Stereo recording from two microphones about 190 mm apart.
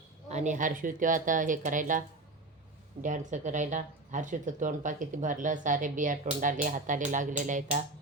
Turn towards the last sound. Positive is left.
turn(degrees=-40)  # may be behind; listen again after turning